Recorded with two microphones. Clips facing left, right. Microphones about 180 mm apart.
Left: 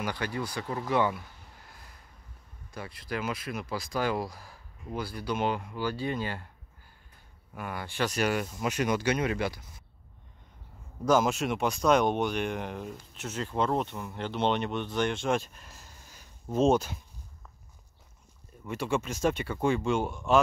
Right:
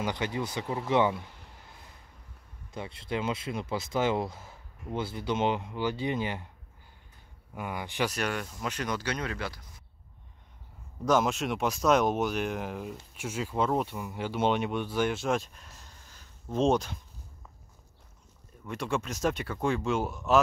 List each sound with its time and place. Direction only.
0.0 s speech: 20° right (ahead or behind)
2.7 s speech: 25° right (ahead or behind)
7.5 s speech: 15° right (ahead or behind)
8.1 s speech: 5° left (ahead or behind)
11.1 s speech: centre (ahead or behind)
18.7 s speech: centre (ahead or behind)